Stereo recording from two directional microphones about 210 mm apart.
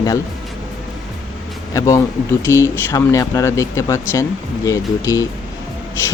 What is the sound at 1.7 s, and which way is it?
Speech, 15° left (ahead or behind).